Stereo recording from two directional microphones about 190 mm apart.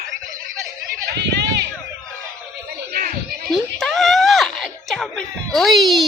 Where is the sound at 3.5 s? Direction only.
Centre (ahead or behind).